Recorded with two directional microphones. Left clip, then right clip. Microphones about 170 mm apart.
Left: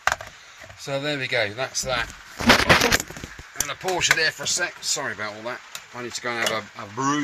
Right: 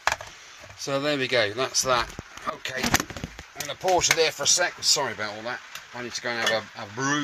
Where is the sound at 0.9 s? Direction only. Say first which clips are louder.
Right 1 dB; 40° right (ahead or behind).